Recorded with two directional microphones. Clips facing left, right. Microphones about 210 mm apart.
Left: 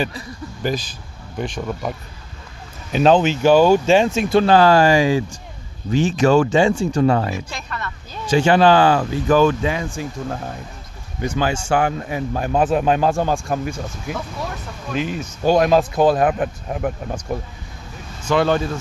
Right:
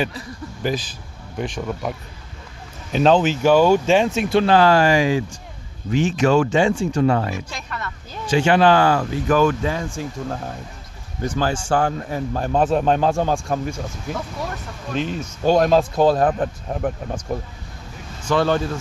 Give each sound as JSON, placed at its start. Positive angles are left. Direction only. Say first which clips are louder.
{"t": 0.6, "sound": "speech", "louder": "left 1 dB", "side_deg": -5}
{"t": 3.2, "sound": "speech", "louder": "left 2 dB", "side_deg": 25}
{"t": 11.1, "sound": "a man's voice", "louder": "left 1 dB", "side_deg": 20}
{"t": 18.3, "sound": "a man's voice", "louder": "left 1 dB", "side_deg": 15}